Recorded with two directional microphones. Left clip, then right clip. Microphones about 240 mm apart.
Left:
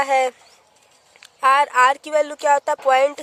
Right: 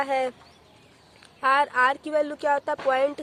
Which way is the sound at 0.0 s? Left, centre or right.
Left.